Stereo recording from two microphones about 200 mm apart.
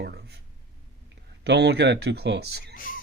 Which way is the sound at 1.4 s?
60° right (ahead or behind).